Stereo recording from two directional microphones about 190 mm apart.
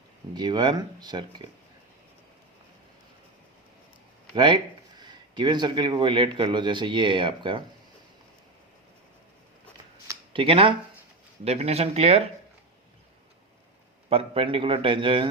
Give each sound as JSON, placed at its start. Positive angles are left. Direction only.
{"t": 0.3, "sound": "speech", "side_deg": -20}
{"t": 4.4, "sound": "speech", "side_deg": -25}
{"t": 10.3, "sound": "speech", "side_deg": -30}
{"t": 14.1, "sound": "speech", "side_deg": -30}